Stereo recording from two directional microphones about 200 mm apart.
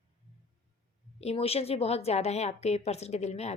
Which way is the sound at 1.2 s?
30° left (ahead or behind).